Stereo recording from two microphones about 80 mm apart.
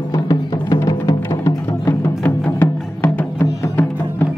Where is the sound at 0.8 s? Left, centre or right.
Left.